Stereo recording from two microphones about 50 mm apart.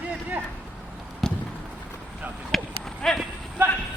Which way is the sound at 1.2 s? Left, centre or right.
Centre.